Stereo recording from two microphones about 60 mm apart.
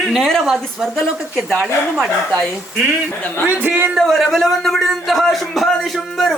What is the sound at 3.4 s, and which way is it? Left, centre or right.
Speech, right.